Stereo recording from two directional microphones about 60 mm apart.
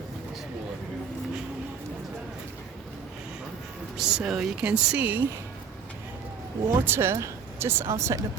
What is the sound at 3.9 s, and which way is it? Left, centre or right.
Speech, centre.